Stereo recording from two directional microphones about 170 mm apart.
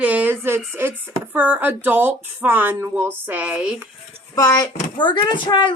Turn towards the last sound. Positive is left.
turn(degrees=25)  # may be behind; listen again after turning